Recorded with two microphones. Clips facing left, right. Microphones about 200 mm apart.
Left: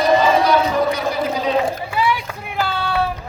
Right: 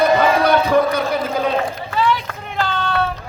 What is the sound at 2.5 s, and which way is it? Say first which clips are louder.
Cat: even; 10° left (ahead or behind).